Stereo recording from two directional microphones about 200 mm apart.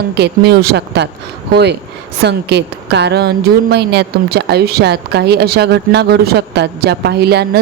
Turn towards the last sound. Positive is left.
turn(degrees=-55)  # may be behind; listen again after turning